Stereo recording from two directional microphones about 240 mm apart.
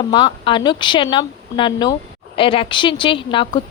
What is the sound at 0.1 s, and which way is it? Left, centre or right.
A woman's voice, centre.